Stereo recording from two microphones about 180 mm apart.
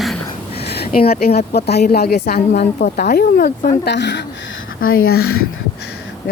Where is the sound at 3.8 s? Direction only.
75° left (ahead or behind).